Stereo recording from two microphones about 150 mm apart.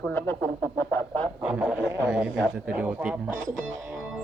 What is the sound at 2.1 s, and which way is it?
Speech, 5° right (ahead or behind).